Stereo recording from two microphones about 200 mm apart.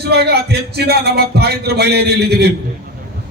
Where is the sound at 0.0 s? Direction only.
55° right (ahead or behind).